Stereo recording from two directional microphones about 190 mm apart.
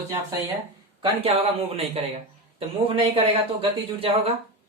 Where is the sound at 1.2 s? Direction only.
30° right (ahead or behind).